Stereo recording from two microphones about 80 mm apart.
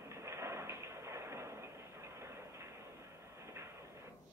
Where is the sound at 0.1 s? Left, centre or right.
Right.